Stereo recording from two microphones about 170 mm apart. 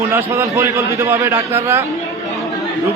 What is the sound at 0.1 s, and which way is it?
A man's voice, 15° right (ahead or behind).